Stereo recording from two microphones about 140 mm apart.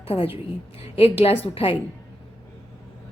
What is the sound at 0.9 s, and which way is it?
Speech, 45° left (ahead or behind).